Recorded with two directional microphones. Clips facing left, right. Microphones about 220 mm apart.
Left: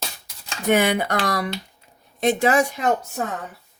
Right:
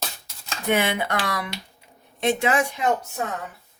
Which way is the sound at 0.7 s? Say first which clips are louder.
Left 4 dB; 40° left (ahead or behind).